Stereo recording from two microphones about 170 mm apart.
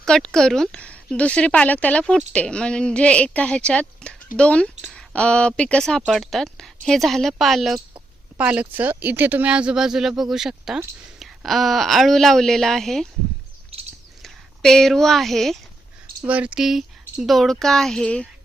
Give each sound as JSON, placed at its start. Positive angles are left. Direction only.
{"t": 0.0, "sound": "speech", "side_deg": 5}
{"t": 13.7, "sound": "chirp", "side_deg": -35}
{"t": 14.2, "sound": "speech", "side_deg": 0}